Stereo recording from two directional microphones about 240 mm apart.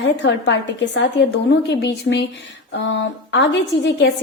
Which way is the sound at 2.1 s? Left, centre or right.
Left.